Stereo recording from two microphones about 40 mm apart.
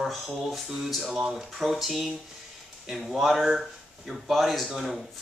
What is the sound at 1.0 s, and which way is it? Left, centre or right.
Speech, centre.